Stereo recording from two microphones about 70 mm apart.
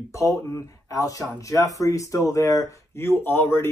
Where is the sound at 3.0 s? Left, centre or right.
Left.